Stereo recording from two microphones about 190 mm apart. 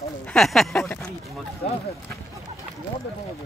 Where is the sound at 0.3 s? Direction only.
Centre (ahead or behind).